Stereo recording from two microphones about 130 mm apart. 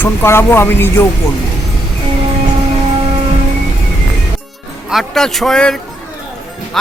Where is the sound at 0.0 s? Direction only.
20° left (ahead or behind).